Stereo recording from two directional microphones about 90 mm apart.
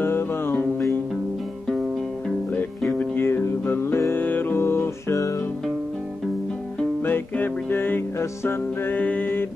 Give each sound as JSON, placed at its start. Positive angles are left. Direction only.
{"t": 0.0, "sound": "music", "side_deg": 25}
{"t": 3.0, "sound": "music", "side_deg": 25}
{"t": 7.0, "sound": "music", "side_deg": 20}